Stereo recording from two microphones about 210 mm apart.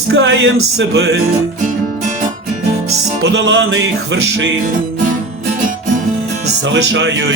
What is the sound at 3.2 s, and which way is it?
Music, 60° right (ahead or behind).